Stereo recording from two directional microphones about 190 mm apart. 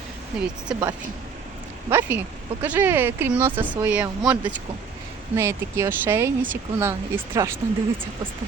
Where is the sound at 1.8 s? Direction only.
15° right (ahead or behind).